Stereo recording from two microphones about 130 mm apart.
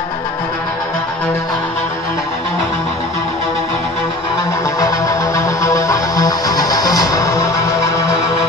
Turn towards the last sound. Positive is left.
turn(degrees=25)  # may be behind; listen again after turning